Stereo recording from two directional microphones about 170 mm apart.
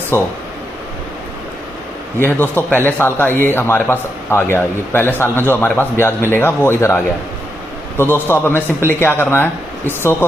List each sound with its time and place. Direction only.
0.1 s a man's voice: 15° left (ahead or behind)
2.1 s a man's voice: 10° left (ahead or behind)